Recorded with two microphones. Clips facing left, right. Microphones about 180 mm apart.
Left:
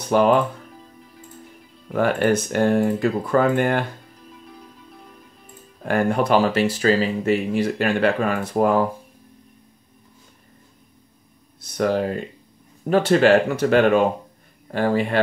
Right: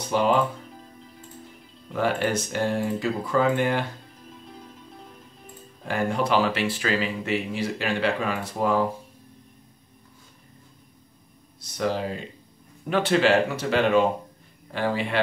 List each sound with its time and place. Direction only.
0.1 s speech: 55° left (ahead or behind)
1.9 s speech: 55° left (ahead or behind)
5.9 s speech: 55° left (ahead or behind)
11.7 s speech: 55° left (ahead or behind)
12.8 s speech: 40° left (ahead or behind)